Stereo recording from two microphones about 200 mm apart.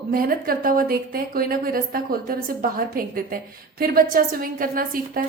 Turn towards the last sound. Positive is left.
turn(degrees=-45)  # may be behind; listen again after turning